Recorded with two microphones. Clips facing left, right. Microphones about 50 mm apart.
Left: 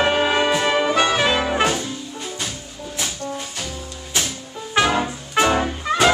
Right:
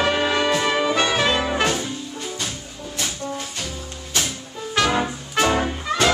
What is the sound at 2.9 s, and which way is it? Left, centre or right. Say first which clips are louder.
Music: even; centre.